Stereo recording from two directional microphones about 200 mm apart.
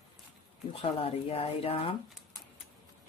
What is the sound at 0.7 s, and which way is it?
Speech, 30° left (ahead or behind).